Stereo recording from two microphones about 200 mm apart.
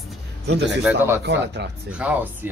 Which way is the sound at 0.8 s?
10° right (ahead or behind).